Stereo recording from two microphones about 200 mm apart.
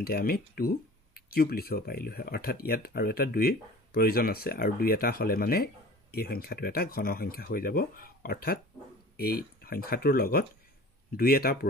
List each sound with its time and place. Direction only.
0.0 s speech: 50° left (ahead or behind)